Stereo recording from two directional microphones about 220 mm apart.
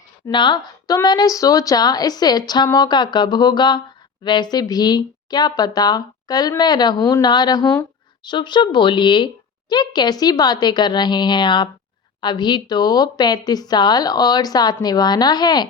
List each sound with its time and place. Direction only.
0.3 s a woman's voice: 20° left (ahead or behind)